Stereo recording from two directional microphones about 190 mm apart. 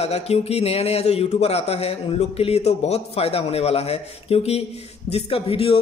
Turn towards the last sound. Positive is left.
turn(degrees=30)  # may be behind; listen again after turning